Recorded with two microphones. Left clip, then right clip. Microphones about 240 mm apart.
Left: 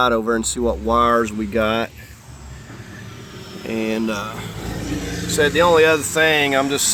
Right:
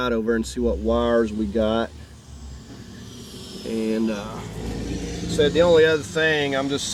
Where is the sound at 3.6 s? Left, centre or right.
Left.